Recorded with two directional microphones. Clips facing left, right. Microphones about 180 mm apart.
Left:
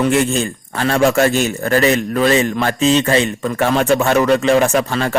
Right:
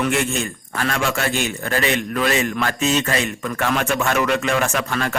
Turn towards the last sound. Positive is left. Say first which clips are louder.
# left 6 dB
turn(degrees=30)  # may be behind; listen again after turning